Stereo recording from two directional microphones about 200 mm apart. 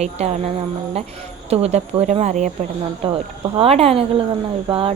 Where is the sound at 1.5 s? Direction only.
30° right (ahead or behind).